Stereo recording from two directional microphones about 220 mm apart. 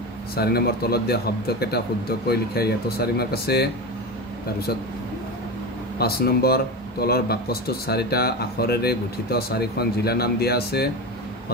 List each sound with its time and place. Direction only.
0.4 s speech: 45° left (ahead or behind)
5.9 s speech: 45° left (ahead or behind)